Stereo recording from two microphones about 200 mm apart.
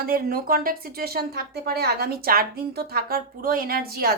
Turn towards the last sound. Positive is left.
turn(degrees=-50)  # may be behind; listen again after turning